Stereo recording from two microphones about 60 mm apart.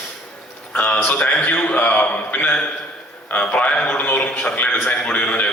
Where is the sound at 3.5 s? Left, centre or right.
Left.